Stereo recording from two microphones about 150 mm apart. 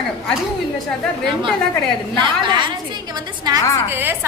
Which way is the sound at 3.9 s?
15° right (ahead or behind).